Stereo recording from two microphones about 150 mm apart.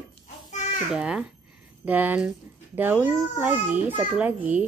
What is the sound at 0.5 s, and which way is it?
Babbling, 55° left (ahead or behind).